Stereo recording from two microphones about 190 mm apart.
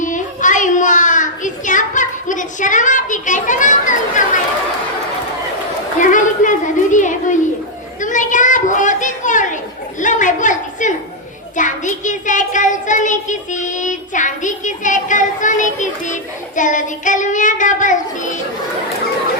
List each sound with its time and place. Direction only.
0.0 s child singing: 40° left (ahead or behind)
6.0 s a child's voice: 40° left (ahead or behind)
8.0 s children playing: 40° left (ahead or behind)
10.0 s a sound: 40° left (ahead or behind)
11.5 s child singing: 40° left (ahead or behind)
16.6 s a child's voice: 40° left (ahead or behind)